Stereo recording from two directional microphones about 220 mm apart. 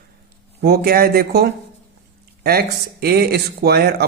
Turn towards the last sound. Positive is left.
turn(degrees=-45)  # may be behind; listen again after turning